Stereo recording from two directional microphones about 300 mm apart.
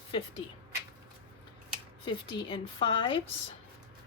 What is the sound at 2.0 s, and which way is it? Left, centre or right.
A woman's voice, centre.